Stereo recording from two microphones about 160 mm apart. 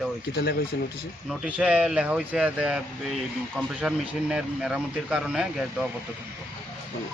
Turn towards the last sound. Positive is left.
turn(degrees=-5)  # may be behind; listen again after turning